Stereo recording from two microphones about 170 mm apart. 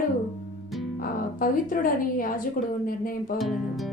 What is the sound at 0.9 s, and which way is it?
Speech, 55° left (ahead or behind).